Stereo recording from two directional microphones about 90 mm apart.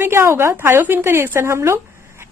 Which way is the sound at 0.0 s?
25° right (ahead or behind).